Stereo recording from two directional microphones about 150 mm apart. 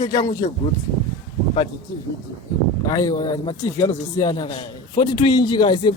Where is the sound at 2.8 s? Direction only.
25° left (ahead or behind).